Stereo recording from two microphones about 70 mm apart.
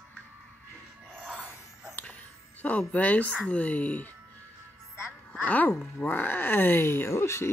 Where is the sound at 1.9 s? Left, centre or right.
Left.